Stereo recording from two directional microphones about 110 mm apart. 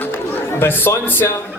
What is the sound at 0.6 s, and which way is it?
Speech, 20° left (ahead or behind).